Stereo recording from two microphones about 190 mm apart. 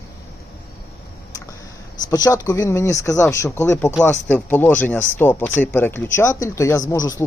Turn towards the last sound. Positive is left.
turn(degrees=20)  # may be behind; listen again after turning